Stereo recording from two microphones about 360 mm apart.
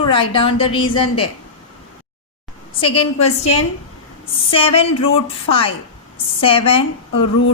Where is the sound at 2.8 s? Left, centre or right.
Centre.